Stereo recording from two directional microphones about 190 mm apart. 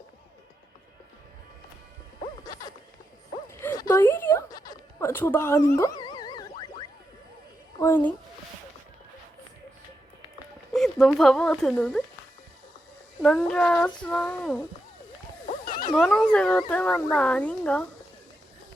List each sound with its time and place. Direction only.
2.4 s zipper: 20° left (ahead or behind)
3.6 s a sound: 15° left (ahead or behind)
7.8 s speech: 10° left (ahead or behind)
10.8 s speech: centre (ahead or behind)
13.2 s speech: 5° left (ahead or behind)
15.4 s wild animals: 45° left (ahead or behind)
15.9 s speech: 5° left (ahead or behind)